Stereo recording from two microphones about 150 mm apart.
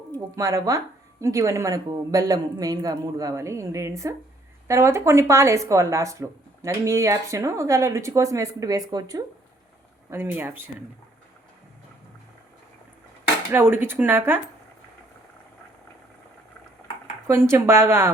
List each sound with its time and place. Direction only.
0.3 s speech: 25° right (ahead or behind)
10.1 s speech: 15° right (ahead or behind)
13.5 s speech: 15° right (ahead or behind)
17.2 s speech: 20° right (ahead or behind)